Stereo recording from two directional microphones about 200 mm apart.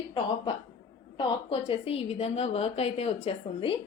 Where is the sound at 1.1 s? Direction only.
25° left (ahead or behind).